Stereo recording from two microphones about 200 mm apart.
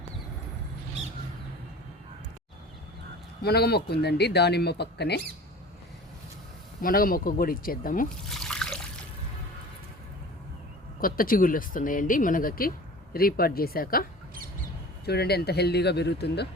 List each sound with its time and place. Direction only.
3.4 s speech: 50° left (ahead or behind)
6.8 s speech: 45° left (ahead or behind)
8.3 s water: 5° left (ahead or behind)
11.0 s speech: 45° left (ahead or behind)
15.0 s speech: 55° left (ahead or behind)